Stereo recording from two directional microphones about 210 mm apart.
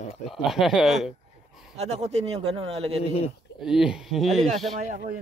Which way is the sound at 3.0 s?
30° left (ahead or behind).